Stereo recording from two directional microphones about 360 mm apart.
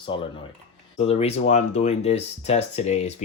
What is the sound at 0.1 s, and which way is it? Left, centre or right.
Speech, centre.